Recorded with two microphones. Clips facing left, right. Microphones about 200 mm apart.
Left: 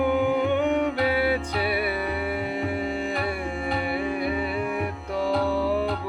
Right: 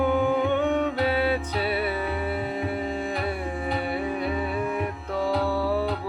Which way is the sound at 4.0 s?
10° left (ahead or behind).